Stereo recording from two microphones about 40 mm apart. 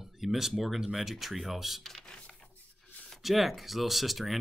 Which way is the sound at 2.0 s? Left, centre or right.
Left.